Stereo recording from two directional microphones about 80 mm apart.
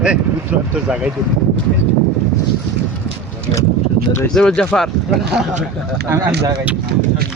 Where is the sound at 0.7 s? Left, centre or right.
Centre.